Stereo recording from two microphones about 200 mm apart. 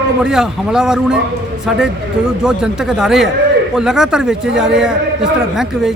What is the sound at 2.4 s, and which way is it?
A man's voice, 5° right (ahead or behind).